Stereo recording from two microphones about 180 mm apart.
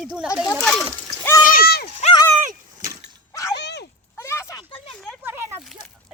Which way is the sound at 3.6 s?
70° left (ahead or behind).